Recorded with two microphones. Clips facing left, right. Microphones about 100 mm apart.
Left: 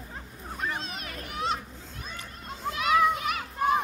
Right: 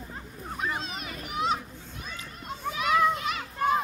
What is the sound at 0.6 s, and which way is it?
A child's voice, centre (ahead or behind).